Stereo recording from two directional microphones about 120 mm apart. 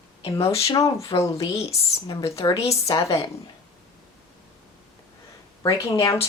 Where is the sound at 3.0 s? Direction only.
50° left (ahead or behind).